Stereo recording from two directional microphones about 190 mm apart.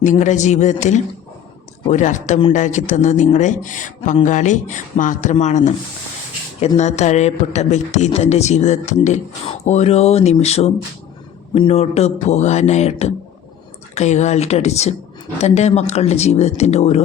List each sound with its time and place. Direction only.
0.0 s speech: 40° left (ahead or behind)